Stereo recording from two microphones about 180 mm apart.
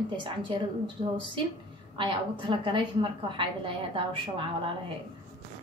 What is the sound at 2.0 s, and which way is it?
A woman's voice, 25° right (ahead or behind).